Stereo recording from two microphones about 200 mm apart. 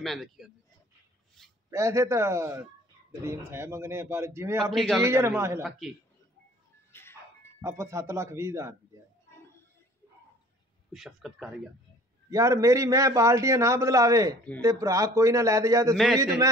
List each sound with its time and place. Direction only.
0.0 s speech: centre (ahead or behind)
1.7 s a man's voice: 15° right (ahead or behind)
4.6 s speech: centre (ahead or behind)
5.0 s a man's voice: 15° right (ahead or behind)
5.6 s speech: centre (ahead or behind)
6.9 s a sound: 10° left (ahead or behind)
7.6 s a man's voice: 15° right (ahead or behind)
10.9 s speech: centre (ahead or behind)
12.3 s a man's voice: 15° right (ahead or behind)
15.9 s speech: centre (ahead or behind)